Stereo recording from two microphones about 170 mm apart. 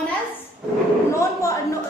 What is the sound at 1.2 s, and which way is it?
Speech, 15° left (ahead or behind).